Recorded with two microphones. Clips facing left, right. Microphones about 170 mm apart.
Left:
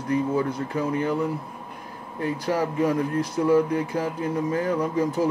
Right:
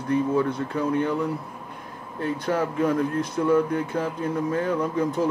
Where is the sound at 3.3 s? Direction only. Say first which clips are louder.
Left 1 dB; 35° left (ahead or behind).